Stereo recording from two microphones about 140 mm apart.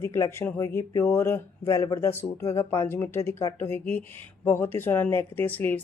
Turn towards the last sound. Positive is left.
turn(degrees=15)  # may be behind; listen again after turning